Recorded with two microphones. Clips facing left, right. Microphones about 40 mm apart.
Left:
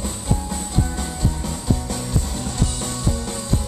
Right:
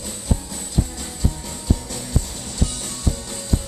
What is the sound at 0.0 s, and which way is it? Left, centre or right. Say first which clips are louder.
Music: left 2 dB; left.